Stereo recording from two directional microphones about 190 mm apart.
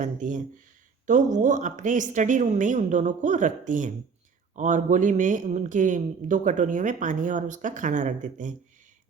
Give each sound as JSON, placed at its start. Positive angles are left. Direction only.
{"t": 0.0, "sound": "a man's voice", "side_deg": -40}